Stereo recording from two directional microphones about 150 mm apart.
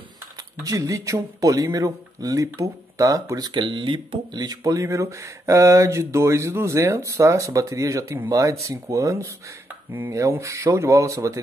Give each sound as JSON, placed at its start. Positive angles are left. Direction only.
{"t": 0.7, "sound": "speech", "side_deg": -25}